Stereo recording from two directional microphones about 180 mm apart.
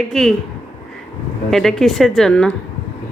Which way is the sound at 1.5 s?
Centre (ahead or behind).